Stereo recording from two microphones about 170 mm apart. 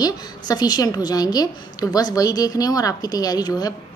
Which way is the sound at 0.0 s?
25° left (ahead or behind).